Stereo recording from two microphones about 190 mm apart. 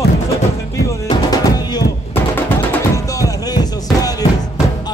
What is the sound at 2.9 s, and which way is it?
Music, 20° left (ahead or behind).